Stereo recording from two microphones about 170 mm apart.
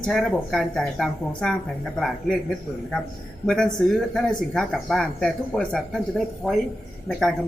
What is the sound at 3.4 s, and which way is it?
Speech, 5° left (ahead or behind).